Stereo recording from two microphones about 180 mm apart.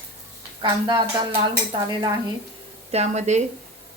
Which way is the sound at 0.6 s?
25° right (ahead or behind).